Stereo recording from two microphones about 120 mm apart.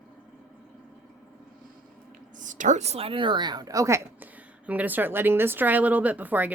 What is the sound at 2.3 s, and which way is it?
A woman's voice, 90° right.